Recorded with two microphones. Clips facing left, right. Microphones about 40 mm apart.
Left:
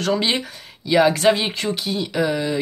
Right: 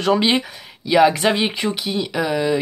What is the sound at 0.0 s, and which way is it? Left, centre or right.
Speech, centre.